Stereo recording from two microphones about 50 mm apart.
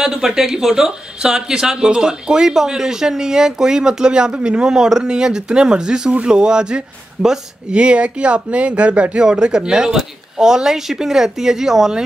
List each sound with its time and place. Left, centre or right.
0.0 s speech: centre